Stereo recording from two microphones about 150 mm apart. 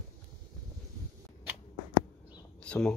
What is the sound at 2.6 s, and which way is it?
Speech, 5° left (ahead or behind).